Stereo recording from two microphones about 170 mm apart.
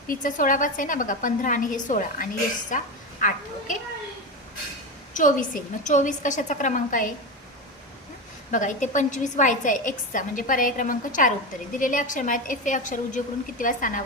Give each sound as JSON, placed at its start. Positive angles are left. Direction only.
{"t": 0.1, "sound": "a woman's voice", "side_deg": 50}
{"t": 5.1, "sound": "a woman's voice", "side_deg": 50}
{"t": 8.4, "sound": "a woman's voice", "side_deg": 50}